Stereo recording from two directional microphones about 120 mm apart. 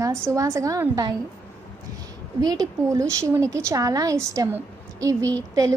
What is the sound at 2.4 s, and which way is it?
A woman's voice, 35° right (ahead or behind).